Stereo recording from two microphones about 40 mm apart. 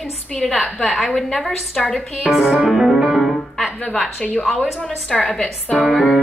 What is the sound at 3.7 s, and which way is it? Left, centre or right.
Speech, left.